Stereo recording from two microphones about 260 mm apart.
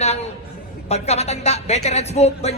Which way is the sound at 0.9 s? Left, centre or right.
Left.